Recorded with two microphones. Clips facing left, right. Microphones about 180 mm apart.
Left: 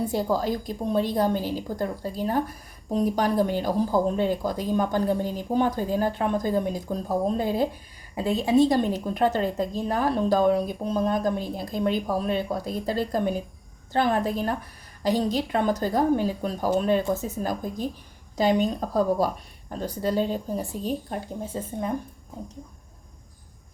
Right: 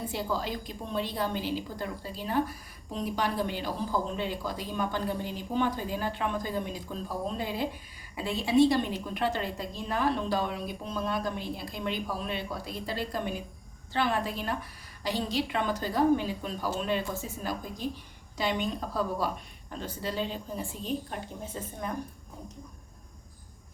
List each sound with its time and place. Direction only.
0.1 s a woman's voice: 40° left (ahead or behind)